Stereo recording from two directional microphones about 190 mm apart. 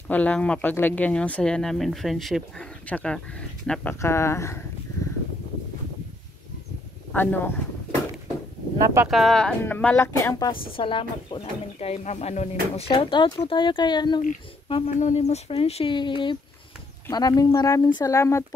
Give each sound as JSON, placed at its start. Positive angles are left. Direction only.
{"t": 0.1, "sound": "speech", "side_deg": 5}
{"t": 7.1, "sound": "speech", "side_deg": 10}
{"t": 8.9, "sound": "speech", "side_deg": -5}
{"t": 10.5, "sound": "speech", "side_deg": 25}
{"t": 14.7, "sound": "speech", "side_deg": 35}